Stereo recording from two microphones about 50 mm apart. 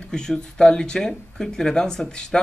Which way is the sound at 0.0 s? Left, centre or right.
Centre.